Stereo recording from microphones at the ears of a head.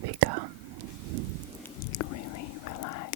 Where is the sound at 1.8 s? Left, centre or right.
Left.